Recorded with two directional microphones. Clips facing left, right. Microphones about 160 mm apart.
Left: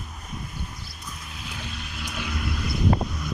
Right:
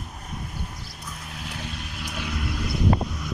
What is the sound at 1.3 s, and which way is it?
Vehicle, 60° right (ahead or behind).